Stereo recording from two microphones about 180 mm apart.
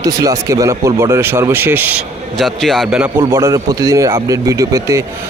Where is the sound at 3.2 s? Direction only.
20° right (ahead or behind).